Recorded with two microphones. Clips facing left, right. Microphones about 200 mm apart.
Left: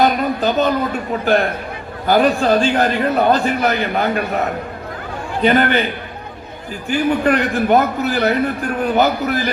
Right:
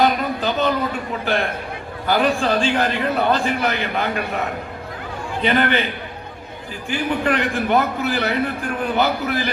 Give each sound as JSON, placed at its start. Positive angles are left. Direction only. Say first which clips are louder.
{"t": 0.0, "sound": "a sound", "louder": "left 3 dB", "side_deg": 45}
{"t": 1.2, "sound": "a man's voice", "louder": "left 6 dB", "side_deg": 45}
{"t": 6.8, "sound": "a man's voice", "louder": "left 5 dB", "side_deg": 45}